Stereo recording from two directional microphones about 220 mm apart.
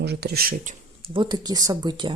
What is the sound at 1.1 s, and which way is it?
Speech, 20° right (ahead or behind).